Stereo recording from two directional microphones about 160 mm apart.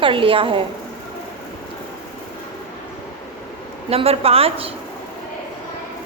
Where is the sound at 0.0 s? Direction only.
35° right (ahead or behind).